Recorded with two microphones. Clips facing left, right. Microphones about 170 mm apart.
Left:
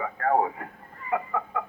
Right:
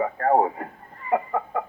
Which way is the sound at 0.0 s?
35° right (ahead or behind).